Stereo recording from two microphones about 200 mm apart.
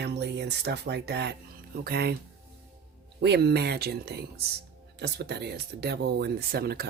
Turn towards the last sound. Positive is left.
turn(degrees=-50)  # may be behind; listen again after turning